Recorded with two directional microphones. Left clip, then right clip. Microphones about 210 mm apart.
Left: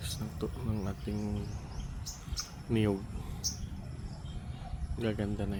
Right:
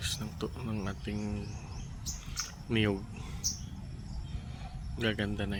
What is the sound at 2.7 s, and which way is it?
Speech, 10° left (ahead or behind).